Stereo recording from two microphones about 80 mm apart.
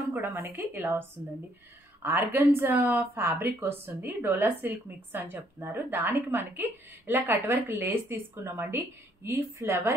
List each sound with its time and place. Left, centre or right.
0.1 s a woman's voice: right
2.0 s a woman's voice: right